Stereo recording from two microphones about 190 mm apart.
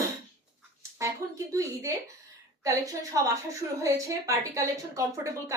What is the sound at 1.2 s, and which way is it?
Speech, 15° right (ahead or behind).